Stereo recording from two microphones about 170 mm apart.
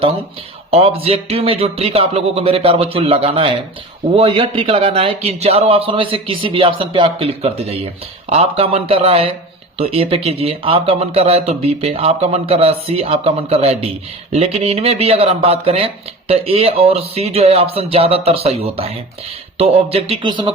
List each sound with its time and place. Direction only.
0.7 s speech: 35° right (ahead or behind)